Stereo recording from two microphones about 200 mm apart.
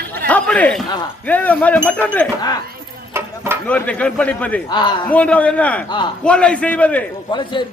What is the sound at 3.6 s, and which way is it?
Speech, 5° left (ahead or behind).